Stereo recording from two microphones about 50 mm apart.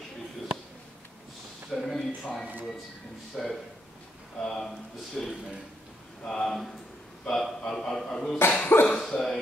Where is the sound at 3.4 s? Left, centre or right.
Centre.